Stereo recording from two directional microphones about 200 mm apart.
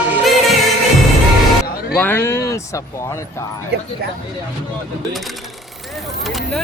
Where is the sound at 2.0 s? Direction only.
10° left (ahead or behind).